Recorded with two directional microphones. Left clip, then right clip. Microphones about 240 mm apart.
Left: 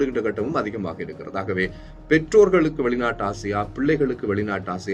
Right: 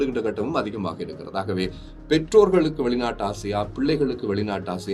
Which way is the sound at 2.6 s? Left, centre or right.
Centre.